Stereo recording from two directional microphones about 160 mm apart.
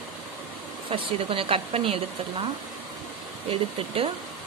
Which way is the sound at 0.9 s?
35° right (ahead or behind).